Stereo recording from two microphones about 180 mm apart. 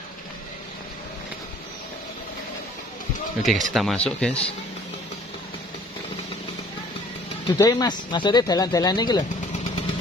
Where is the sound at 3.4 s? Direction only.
Centre (ahead or behind).